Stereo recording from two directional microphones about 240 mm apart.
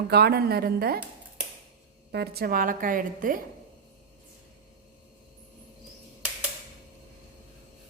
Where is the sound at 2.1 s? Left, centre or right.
Right.